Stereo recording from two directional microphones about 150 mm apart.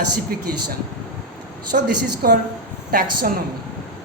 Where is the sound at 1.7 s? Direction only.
85° right.